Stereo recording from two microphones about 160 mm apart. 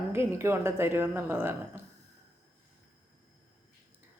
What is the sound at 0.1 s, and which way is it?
Speech, 15° right (ahead or behind).